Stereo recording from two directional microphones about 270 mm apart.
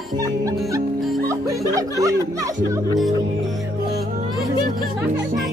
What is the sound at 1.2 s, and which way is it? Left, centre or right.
Music, centre.